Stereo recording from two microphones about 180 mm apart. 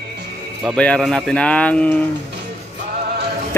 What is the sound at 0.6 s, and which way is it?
Speech, centre (ahead or behind).